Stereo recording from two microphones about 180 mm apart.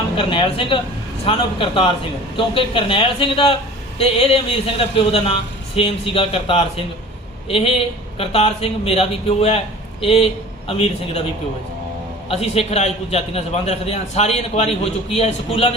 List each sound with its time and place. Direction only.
0.2 s a man's voice: 30° left (ahead or behind)
12.3 s a man's voice: 35° left (ahead or behind)